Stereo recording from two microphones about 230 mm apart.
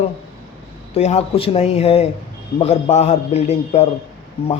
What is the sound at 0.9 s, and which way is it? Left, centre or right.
Speech, left.